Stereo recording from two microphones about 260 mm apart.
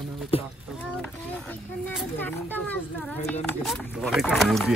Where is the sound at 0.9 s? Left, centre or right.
Centre.